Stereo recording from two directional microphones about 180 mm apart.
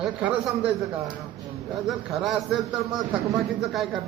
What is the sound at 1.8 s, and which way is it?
A man's voice, centre (ahead or behind).